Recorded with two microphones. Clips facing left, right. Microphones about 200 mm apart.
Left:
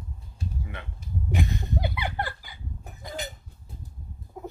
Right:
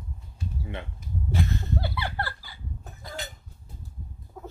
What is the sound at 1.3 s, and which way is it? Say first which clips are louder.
Laughter: even; 15° left (ahead or behind).